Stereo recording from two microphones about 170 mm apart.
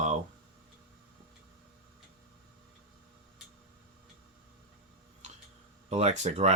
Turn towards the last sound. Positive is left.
turn(degrees=-40)  # may be behind; listen again after turning